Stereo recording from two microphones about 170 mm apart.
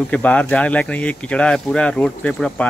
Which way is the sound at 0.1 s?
10° left (ahead or behind).